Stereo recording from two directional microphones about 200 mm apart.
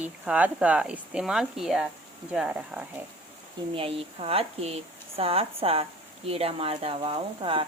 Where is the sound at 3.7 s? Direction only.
25° right (ahead or behind).